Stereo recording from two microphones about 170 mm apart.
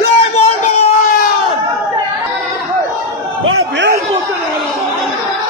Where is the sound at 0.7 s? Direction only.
40° left (ahead or behind).